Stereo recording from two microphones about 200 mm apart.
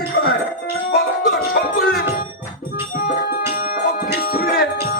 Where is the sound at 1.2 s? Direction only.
45° left (ahead or behind).